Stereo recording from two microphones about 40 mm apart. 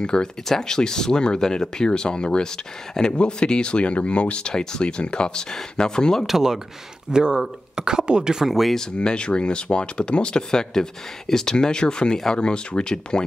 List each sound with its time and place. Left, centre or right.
0.0 s speech: centre
6.2 s speech: centre
8.5 s speech: centre
8.9 s speech: left